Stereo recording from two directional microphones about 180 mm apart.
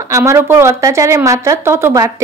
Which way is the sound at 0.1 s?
15° right (ahead or behind).